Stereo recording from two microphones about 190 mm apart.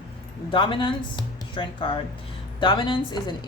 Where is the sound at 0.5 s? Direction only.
25° left (ahead or behind).